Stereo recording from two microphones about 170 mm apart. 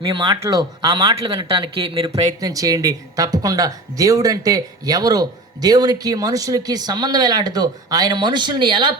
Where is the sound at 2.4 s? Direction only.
20° right (ahead or behind).